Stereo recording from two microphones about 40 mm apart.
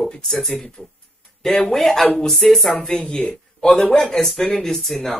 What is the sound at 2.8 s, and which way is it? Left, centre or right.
Speech, left.